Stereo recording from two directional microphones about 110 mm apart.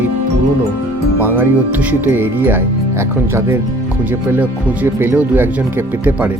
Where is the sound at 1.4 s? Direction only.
20° right (ahead or behind).